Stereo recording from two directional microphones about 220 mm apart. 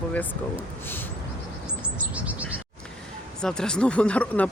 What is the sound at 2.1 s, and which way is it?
Chirp, 5° right (ahead or behind).